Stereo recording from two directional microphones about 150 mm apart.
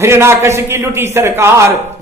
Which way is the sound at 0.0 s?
15° right (ahead or behind).